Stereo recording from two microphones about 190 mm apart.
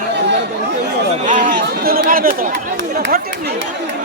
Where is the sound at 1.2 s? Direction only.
45° right (ahead or behind).